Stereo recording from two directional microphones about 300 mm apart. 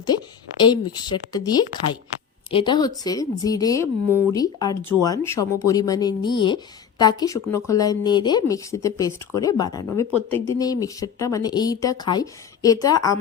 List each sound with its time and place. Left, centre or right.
0.6 s speech: centre
2.5 s speech: centre
10.1 s speech: centre
10.6 s speech: centre